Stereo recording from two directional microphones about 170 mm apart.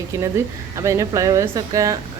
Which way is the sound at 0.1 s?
15° right (ahead or behind).